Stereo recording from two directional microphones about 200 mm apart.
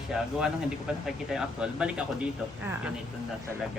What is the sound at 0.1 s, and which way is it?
A woman's voice, 5° right (ahead or behind).